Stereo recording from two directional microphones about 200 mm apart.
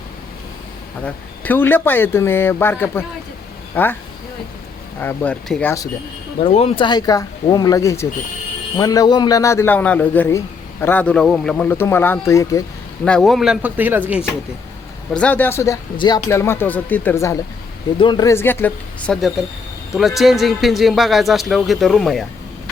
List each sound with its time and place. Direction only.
1.0 s a man's voice: 10° left (ahead or behind)
4.9 s a man's voice: 10° left (ahead or behind)
6.4 s a man's voice: 30° left (ahead or behind)
13.1 s a man's voice: centre (ahead or behind)
15.1 s a man's voice: 5° left (ahead or behind)